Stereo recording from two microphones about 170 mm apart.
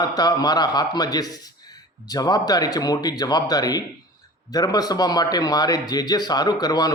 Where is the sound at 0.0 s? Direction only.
25° left (ahead or behind).